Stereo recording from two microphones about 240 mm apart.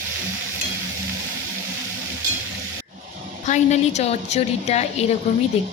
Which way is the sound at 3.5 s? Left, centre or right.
Left.